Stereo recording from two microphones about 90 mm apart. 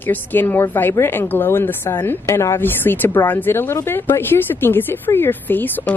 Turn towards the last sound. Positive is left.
turn(degrees=20)  # may be behind; listen again after turning